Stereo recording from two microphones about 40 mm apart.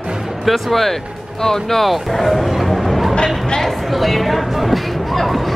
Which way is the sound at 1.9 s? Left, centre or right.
Centre.